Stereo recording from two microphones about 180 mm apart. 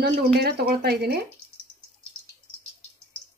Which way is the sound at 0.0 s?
60° right (ahead or behind).